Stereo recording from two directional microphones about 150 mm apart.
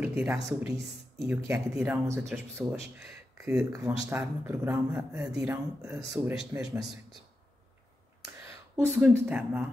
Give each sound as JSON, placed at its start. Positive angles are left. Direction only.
{"t": 0.0, "sound": "a sound", "side_deg": -10}
{"t": 0.5, "sound": "a man's voice", "side_deg": -20}
{"t": 1.5, "sound": "a man's voice", "side_deg": -10}
{"t": 8.7, "sound": "speech", "side_deg": -10}